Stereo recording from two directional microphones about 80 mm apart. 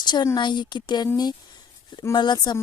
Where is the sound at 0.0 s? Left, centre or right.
Left.